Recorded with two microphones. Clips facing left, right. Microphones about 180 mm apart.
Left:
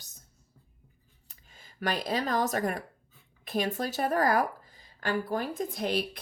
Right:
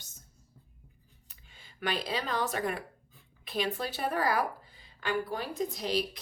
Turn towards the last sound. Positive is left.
turn(degrees=55)  # may be behind; listen again after turning